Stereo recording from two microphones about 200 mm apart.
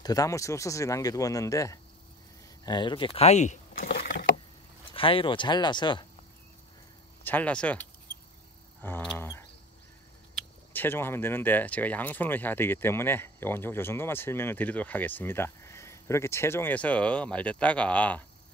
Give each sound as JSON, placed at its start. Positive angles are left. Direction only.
{"t": 0.0, "sound": "speech", "side_deg": 15}
{"t": 4.9, "sound": "speech", "side_deg": 25}
{"t": 7.2, "sound": "speech", "side_deg": 5}
{"t": 8.8, "sound": "speech", "side_deg": 5}
{"t": 10.7, "sound": "speech", "side_deg": 10}